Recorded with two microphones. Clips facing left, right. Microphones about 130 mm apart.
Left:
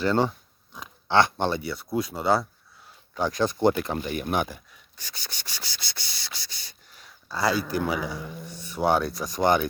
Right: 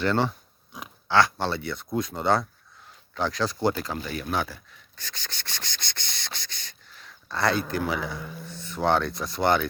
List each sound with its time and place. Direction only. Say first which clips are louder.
0.0 s speech: left 1 dB; 10° left (ahead or behind)
1.0 s speech: left 1 dB; 20° left (ahead or behind)
3.8 s rub: left 3 dB; 25° left (ahead or behind); by 7.6 s 5° left (ahead or behind)
7.7 s speech: left 1 dB; 10° left (ahead or behind)